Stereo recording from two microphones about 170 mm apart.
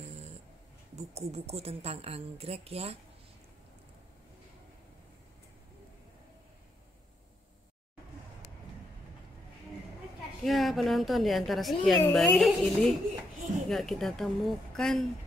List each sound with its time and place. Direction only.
0.1 s snoring: 40° right (ahead or behind)
0.9 s speech: 40° right (ahead or behind)
10.4 s a woman's voice: centre (ahead or behind)